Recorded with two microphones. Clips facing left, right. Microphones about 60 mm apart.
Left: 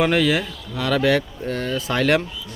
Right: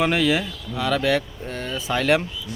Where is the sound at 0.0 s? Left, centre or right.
Centre.